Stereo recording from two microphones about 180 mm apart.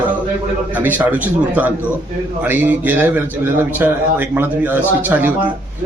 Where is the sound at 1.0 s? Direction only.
10° right (ahead or behind).